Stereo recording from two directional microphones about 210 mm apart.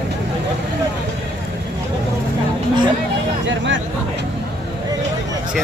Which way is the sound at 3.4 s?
60° right (ahead or behind).